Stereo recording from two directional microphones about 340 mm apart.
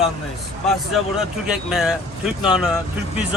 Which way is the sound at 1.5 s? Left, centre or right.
Centre.